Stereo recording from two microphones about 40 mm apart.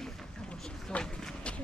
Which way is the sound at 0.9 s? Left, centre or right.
Left.